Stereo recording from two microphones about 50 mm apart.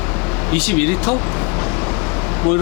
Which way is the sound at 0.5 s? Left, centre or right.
Centre.